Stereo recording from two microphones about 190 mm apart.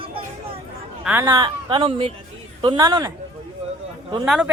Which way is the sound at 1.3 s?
25° right (ahead or behind).